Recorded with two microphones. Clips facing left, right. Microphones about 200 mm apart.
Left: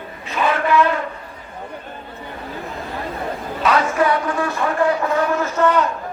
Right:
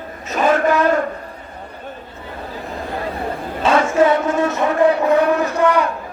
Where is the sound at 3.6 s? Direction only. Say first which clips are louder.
Right 4 dB; 25° right (ahead or behind).